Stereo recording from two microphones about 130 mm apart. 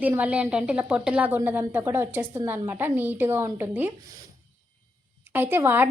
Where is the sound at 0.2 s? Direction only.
10° right (ahead or behind).